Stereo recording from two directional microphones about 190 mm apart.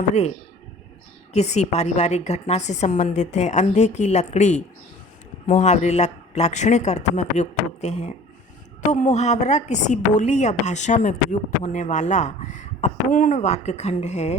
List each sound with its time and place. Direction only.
0.1 s speech: 35° left (ahead or behind)